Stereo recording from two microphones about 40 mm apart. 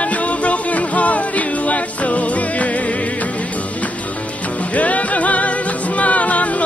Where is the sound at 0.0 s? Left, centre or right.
Left.